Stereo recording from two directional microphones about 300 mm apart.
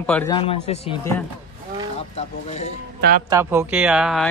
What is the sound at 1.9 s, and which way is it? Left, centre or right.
Speech, left.